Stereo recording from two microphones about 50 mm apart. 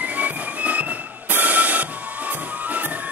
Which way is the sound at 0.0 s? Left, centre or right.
Right.